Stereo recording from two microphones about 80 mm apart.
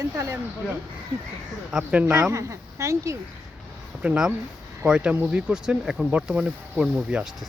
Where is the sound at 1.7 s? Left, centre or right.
Centre.